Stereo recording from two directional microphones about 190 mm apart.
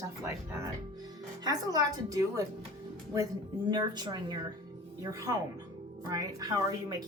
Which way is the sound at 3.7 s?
20° right (ahead or behind).